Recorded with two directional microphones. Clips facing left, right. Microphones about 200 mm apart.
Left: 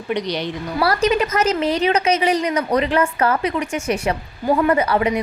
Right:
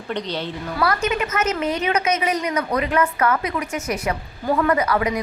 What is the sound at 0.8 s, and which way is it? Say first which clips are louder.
A woman's voice: left 4 dB; 35° left (ahead or behind).